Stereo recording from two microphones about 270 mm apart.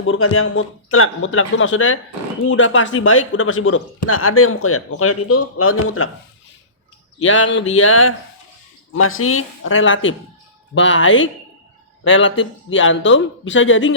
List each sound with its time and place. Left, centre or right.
0.0 s speech: left
7.2 s speech: left